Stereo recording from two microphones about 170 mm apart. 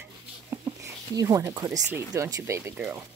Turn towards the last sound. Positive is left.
turn(degrees=-10)  # may be behind; listen again after turning